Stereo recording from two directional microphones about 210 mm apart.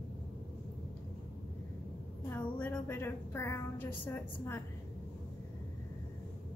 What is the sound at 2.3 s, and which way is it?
A woman's voice, 10° left (ahead or behind).